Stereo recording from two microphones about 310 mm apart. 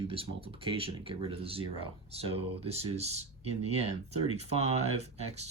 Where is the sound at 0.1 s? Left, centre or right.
Centre.